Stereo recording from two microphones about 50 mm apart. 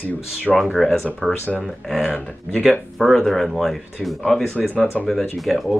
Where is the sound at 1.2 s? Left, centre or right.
Centre.